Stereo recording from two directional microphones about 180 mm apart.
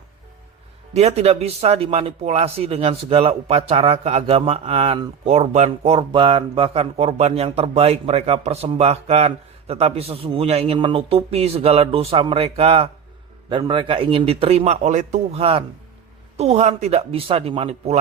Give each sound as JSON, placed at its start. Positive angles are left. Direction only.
{"t": 0.9, "sound": "speech", "side_deg": -35}